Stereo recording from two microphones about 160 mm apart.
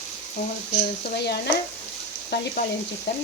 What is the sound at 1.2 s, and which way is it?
Speech, 90° left.